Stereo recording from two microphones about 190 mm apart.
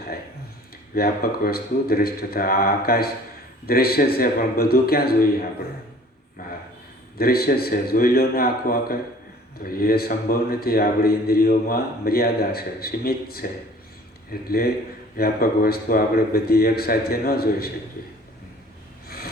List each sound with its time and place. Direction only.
0.9 s speech: 55° left (ahead or behind)
7.2 s speech: 55° left (ahead or behind)
19.0 s vehicle: 55° left (ahead or behind)